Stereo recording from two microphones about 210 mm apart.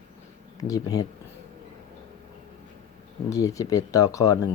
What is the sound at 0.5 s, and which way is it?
Speech, 15° left (ahead or behind).